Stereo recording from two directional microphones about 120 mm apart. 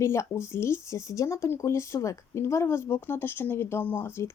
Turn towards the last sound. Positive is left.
turn(degrees=20)  # may be behind; listen again after turning